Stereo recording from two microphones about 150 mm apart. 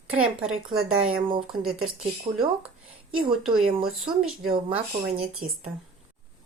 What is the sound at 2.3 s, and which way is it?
Speech, 40° right (ahead or behind).